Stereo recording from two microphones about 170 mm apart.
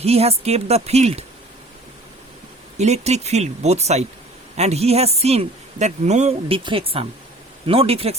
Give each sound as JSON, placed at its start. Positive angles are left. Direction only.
{"t": 0.0, "sound": "a woman's voice", "side_deg": -35}
{"t": 2.7, "sound": "a woman's voice", "side_deg": -40}